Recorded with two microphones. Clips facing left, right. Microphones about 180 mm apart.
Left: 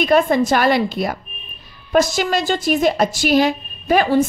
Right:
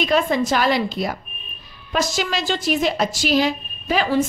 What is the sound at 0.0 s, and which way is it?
A woman's voice, 50° left (ahead or behind).